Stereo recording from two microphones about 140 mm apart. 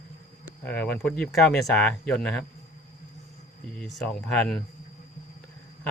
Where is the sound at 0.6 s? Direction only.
10° left (ahead or behind).